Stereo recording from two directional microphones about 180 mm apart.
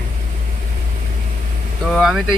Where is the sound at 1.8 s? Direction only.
Centre (ahead or behind).